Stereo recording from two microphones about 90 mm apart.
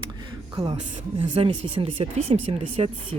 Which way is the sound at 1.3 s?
70° right (ahead or behind).